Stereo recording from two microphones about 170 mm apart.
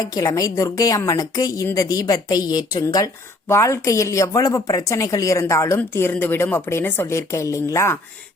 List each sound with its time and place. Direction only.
0.0 s a woman's voice: 20° left (ahead or behind)